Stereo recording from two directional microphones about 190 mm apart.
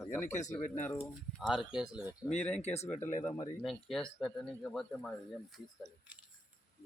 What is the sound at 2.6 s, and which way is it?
Speech, 35° left (ahead or behind).